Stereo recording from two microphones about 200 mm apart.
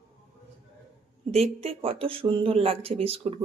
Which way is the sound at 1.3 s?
30° right (ahead or behind).